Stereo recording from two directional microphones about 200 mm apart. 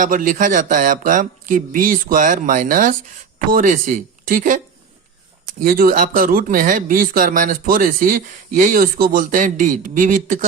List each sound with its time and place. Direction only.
0.0 s speech: 45° right (ahead or behind)
5.6 s speech: 45° right (ahead or behind)